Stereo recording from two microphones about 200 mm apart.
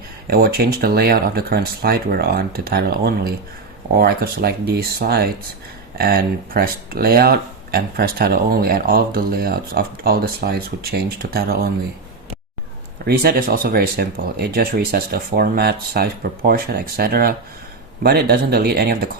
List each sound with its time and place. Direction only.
0.3 s speech: 50° right (ahead or behind)
13.1 s speech: 50° right (ahead or behind)